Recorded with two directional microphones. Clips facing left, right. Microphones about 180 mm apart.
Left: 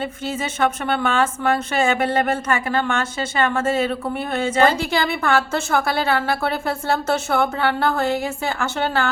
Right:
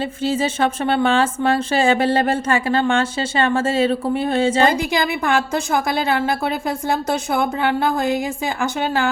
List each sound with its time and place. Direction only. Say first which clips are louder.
0.0 s a woman's voice: right 5 dB; 30° right (ahead or behind)
4.7 s a woman's voice: right 2 dB; 15° right (ahead or behind)